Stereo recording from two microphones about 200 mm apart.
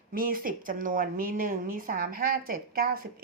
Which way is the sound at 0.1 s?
45° right (ahead or behind).